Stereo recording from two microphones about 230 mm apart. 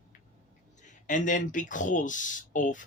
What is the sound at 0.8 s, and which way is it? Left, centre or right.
Speech, left.